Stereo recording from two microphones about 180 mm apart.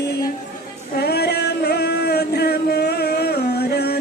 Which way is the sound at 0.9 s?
65° left (ahead or behind).